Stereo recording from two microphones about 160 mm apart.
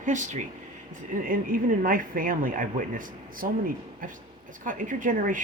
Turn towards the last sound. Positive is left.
turn(degrees=-55)  # may be behind; listen again after turning